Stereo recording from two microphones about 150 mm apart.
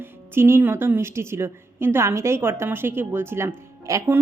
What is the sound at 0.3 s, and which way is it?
A woman's voice, 15° right (ahead or behind).